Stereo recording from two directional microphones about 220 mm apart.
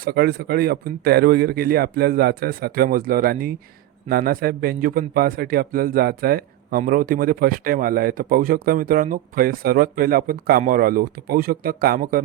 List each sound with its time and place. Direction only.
0.0 s a man's voice: 45° right (ahead or behind)